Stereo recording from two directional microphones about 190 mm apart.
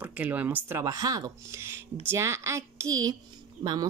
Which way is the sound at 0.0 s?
10° right (ahead or behind).